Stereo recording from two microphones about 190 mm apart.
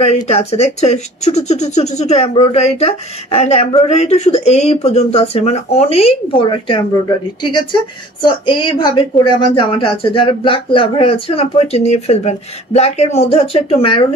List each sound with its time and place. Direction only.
0.0 s speech: 35° left (ahead or behind)